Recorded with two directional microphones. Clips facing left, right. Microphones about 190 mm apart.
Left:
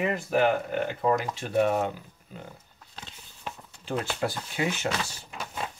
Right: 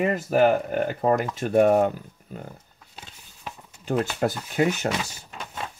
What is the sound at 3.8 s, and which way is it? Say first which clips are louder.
Speech: right 5 dB; 45° right (ahead or behind).